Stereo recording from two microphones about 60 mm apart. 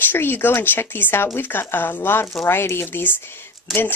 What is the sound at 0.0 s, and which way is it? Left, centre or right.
Speech, left.